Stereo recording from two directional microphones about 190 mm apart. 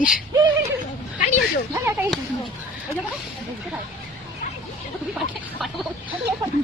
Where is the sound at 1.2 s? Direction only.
40° left (ahead or behind).